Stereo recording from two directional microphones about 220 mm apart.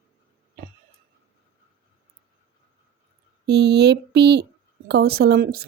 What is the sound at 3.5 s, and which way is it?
Speech, 50° right (ahead or behind).